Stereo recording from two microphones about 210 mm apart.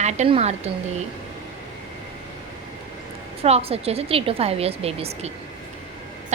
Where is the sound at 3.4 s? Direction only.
30° right (ahead or behind).